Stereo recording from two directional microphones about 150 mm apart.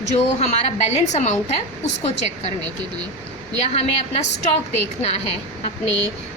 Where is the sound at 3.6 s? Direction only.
45° left (ahead or behind).